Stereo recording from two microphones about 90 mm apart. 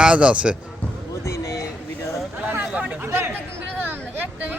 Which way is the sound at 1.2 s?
35° left (ahead or behind).